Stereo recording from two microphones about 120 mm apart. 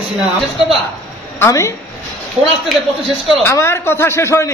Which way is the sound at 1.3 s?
25° left (ahead or behind).